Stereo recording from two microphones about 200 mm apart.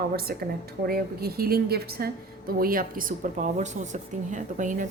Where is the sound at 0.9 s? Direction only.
50° right (ahead or behind).